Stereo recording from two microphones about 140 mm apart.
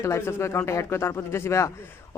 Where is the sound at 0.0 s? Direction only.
20° left (ahead or behind).